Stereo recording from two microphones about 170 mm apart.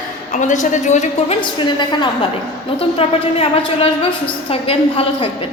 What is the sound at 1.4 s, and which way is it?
A woman's voice, 25° left (ahead or behind).